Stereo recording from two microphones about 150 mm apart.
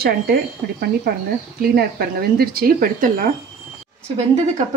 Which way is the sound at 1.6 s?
90° right.